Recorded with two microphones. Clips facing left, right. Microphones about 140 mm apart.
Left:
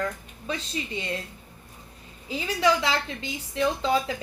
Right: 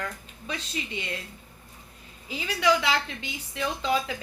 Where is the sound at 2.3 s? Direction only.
35° left (ahead or behind).